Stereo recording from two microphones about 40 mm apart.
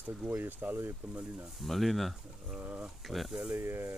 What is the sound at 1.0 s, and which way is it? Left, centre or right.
Speech, right.